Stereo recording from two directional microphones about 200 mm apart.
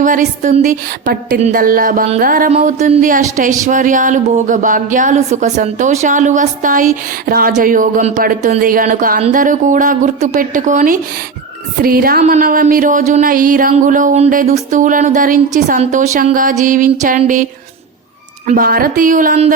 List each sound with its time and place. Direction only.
0.0 s speech: 40° right (ahead or behind)
18.4 s speech: 45° right (ahead or behind)